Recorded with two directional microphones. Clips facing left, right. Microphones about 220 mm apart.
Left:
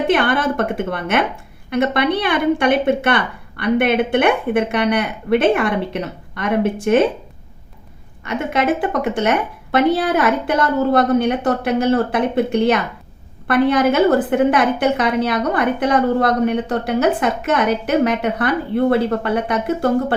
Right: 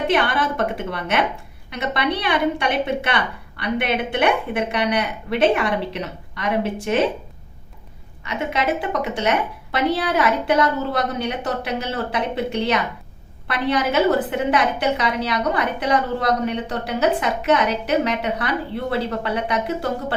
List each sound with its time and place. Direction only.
0.1 s a woman's voice: 50° left (ahead or behind)
8.2 s a woman's voice: 50° left (ahead or behind)